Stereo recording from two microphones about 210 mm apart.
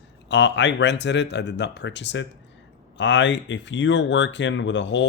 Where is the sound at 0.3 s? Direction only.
60° left (ahead or behind).